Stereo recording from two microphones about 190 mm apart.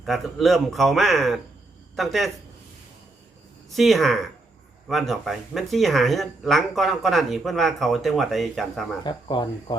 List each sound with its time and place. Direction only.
0.0 s speech: centre (ahead or behind)
3.8 s speech: centre (ahead or behind)
9.0 s speech: 25° left (ahead or behind)